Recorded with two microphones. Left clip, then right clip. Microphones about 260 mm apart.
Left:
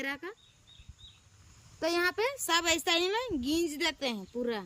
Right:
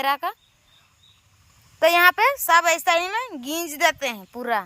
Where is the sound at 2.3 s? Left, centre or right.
Centre.